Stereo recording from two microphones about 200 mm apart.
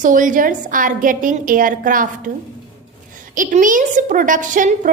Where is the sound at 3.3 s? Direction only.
40° right (ahead or behind).